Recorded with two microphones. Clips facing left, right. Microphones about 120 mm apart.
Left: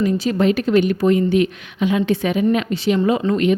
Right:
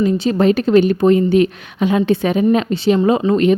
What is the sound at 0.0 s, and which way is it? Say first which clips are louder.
A woman's voice: right 3 dB; 30° right (ahead or behind).